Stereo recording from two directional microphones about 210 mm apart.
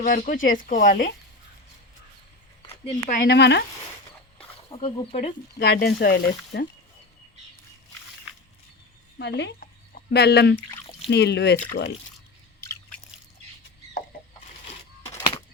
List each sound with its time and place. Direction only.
0.0 s speech: 40° left (ahead or behind)
2.6 s a sound: 30° left (ahead or behind)
3.2 s speech: 50° left (ahead or behind)
4.7 s speech: 25° left (ahead or behind)
5.5 s speech: 50° left (ahead or behind)
9.1 s speech: 55° left (ahead or behind)